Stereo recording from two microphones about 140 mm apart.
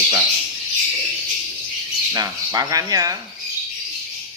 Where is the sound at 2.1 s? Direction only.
25° right (ahead or behind).